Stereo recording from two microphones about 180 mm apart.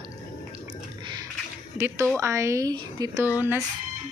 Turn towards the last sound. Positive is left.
turn(degrees=-10)  # may be behind; listen again after turning